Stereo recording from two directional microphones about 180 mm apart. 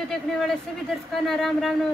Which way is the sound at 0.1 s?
Centre (ahead or behind).